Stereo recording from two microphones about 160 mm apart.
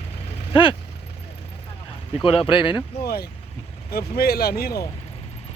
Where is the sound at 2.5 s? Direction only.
30° left (ahead or behind).